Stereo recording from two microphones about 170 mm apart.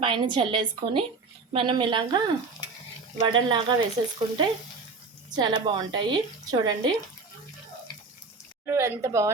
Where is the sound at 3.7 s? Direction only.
25° right (ahead or behind).